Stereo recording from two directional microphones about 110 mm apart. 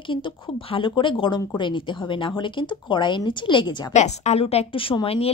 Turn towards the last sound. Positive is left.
turn(degrees=60)  # may be behind; listen again after turning